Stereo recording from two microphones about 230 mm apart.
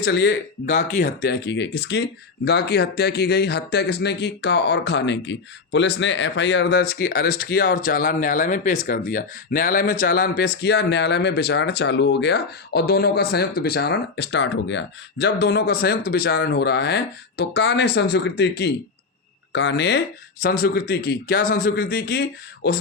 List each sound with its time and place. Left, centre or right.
0.0 s a man's voice: left